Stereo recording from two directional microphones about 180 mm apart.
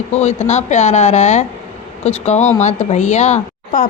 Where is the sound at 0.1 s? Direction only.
40° left (ahead or behind).